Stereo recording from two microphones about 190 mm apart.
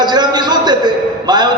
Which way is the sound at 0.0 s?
20° right (ahead or behind).